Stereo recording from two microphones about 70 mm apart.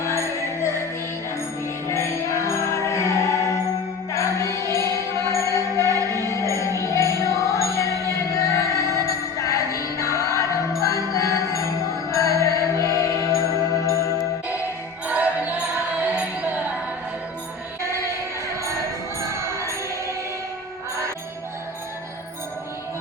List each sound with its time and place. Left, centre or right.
0.0 s music: left
1.9 s music: left
15.0 s music: right
17.8 s music: right
19.3 s music: right